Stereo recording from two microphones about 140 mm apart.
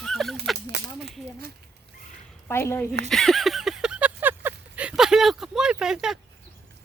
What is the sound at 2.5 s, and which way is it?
Speech, 15° left (ahead or behind).